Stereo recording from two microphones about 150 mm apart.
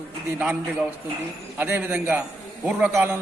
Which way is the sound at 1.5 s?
10° right (ahead or behind).